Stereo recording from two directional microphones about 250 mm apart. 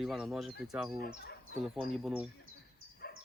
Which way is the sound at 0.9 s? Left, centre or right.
Left.